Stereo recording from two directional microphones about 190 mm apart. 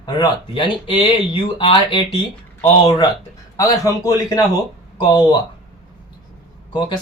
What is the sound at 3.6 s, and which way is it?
Speech, 20° left (ahead or behind).